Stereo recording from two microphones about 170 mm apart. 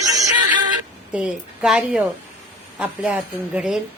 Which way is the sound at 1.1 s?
5° right (ahead or behind).